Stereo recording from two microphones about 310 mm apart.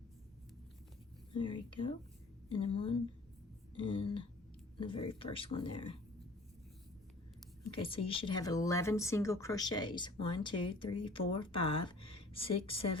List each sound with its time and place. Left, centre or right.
1.3 s speech: centre
7.8 s speech: centre